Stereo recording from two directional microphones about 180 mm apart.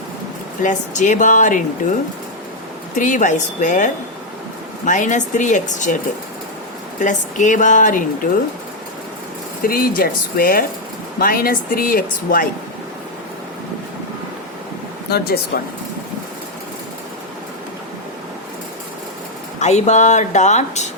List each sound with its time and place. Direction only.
0.6 s speech: 45° left (ahead or behind)
2.9 s speech: 45° left (ahead or behind)
7.0 s speech: 45° left (ahead or behind)
9.6 s speech: 55° left (ahead or behind)
15.1 s speech: 60° left (ahead or behind)
19.5 s speech: 40° left (ahead or behind)